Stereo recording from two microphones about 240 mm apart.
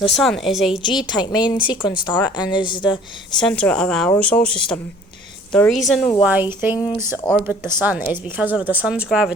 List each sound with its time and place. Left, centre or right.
0.2 s a woman's voice: centre
0.8 s a woman's voice: centre
3.3 s a woman's voice: centre
6.2 s a woman's voice: centre